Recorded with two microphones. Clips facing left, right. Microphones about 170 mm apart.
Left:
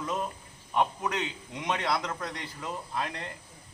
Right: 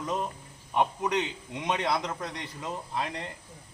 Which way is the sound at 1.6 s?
20° right (ahead or behind).